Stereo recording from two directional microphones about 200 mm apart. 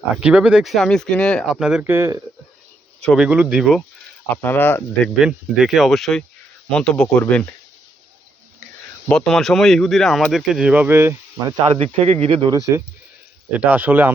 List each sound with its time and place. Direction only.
0.2 s speech: 5° right (ahead or behind)
3.0 s speech: 5° left (ahead or behind)
4.3 s speech: 10° left (ahead or behind)
5.2 s speech: centre (ahead or behind)
9.0 s speech: centre (ahead or behind)
11.6 s speech: 25° right (ahead or behind)
13.5 s speech: 5° right (ahead or behind)